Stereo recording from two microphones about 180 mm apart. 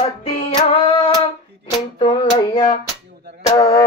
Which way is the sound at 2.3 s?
20° left (ahead or behind).